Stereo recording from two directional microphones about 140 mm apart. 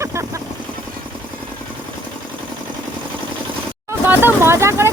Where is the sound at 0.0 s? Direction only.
20° right (ahead or behind).